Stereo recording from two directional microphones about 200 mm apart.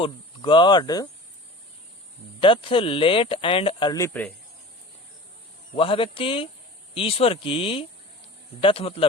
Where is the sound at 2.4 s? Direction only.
25° left (ahead or behind).